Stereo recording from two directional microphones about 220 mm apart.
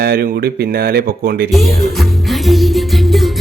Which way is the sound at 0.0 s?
45° right (ahead or behind).